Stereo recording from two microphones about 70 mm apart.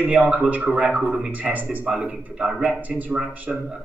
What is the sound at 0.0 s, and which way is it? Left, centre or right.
A man's voice, right.